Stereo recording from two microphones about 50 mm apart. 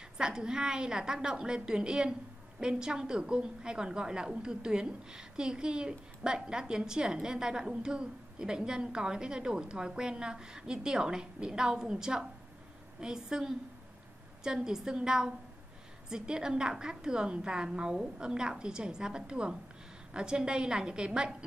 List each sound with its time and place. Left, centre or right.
0.2 s a woman's voice: centre